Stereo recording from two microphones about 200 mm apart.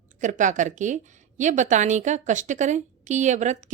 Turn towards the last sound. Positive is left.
turn(degrees=-35)  # may be behind; listen again after turning